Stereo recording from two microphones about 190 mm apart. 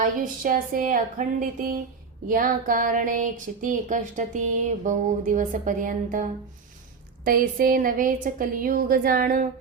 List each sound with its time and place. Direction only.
0.0 s a woman's voice: 45° right (ahead or behind)
7.3 s a woman's voice: 50° right (ahead or behind)